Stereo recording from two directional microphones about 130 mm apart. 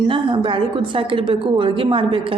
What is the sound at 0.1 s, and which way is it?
A woman's voice, 40° right (ahead or behind).